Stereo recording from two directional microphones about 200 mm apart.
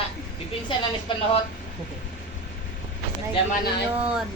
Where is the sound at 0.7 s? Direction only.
25° left (ahead or behind).